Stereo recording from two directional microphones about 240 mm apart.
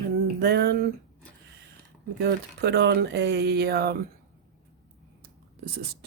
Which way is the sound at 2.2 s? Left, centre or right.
Right.